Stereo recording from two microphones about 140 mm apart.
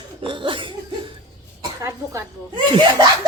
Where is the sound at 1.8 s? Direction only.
20° right (ahead or behind).